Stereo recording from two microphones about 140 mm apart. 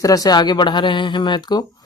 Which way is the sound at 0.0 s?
25° left (ahead or behind).